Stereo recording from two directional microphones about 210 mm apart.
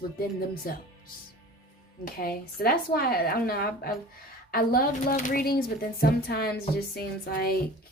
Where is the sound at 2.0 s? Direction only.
45° left (ahead or behind).